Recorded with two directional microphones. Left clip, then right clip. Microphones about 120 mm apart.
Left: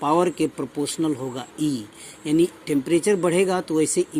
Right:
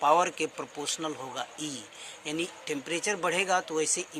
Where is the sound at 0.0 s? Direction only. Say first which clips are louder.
Left 4 dB; 25° left (ahead or behind).